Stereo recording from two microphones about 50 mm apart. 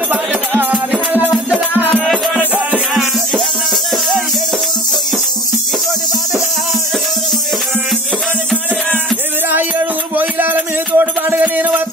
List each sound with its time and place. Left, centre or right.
0.1 s music: right
1.8 s music: right
2.9 s music: centre
9.5 s music: right
11.4 s music: right